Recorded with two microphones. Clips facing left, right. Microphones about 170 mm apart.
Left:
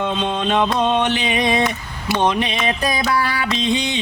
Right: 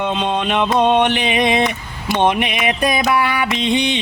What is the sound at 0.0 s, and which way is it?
Music, 60° right (ahead or behind).